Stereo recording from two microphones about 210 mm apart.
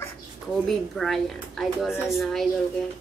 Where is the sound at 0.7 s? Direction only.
Centre (ahead or behind).